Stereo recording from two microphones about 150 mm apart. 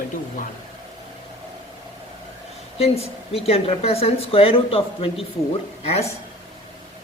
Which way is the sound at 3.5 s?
40° left (ahead or behind).